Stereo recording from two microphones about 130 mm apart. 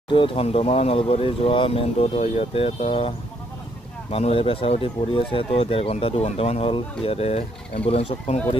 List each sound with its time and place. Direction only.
0.1 s speech: 40° left (ahead or behind)